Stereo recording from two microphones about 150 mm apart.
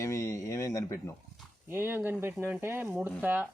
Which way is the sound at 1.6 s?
15° right (ahead or behind).